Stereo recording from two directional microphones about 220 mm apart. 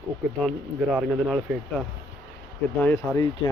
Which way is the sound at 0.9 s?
5° right (ahead or behind).